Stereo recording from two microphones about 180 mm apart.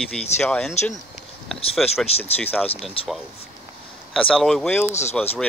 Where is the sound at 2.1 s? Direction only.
35° left (ahead or behind).